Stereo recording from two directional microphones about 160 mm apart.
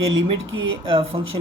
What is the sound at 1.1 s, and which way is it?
Speech, 30° right (ahead or behind).